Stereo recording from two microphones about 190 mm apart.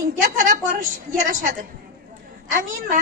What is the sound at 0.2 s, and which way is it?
Speech, 45° right (ahead or behind).